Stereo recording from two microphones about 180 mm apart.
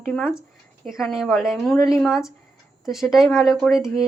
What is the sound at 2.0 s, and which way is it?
Speech, 5° right (ahead or behind).